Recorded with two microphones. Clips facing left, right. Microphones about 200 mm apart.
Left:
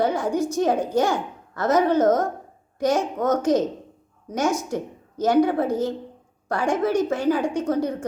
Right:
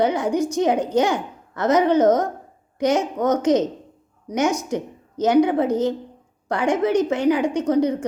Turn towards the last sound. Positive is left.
turn(degrees=-20)  # may be behind; listen again after turning